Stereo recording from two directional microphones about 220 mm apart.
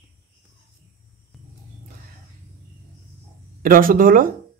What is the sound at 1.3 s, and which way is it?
Music, centre (ahead or behind).